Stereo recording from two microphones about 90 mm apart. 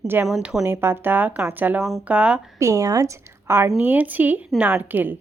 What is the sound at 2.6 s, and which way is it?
A woman's voice, 35° right (ahead or behind).